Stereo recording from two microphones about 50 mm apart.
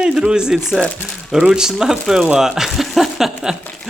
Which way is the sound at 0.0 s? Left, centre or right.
Centre.